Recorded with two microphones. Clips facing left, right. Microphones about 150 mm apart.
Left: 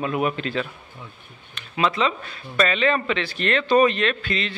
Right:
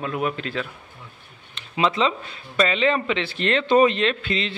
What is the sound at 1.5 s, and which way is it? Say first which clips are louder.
Speech: right 1 dB; 25° right (ahead or behind).